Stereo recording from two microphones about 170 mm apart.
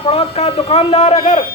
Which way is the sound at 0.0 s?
35° left (ahead or behind).